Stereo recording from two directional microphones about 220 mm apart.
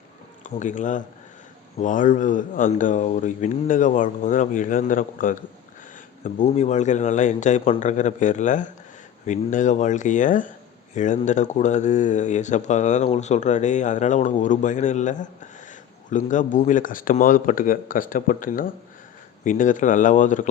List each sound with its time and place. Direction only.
0.4 s speech: 35° left (ahead or behind)